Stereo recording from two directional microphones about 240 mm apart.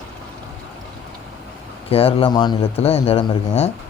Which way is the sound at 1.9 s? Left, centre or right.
Left.